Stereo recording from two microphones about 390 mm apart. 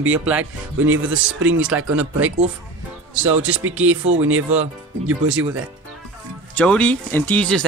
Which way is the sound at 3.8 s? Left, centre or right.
Right.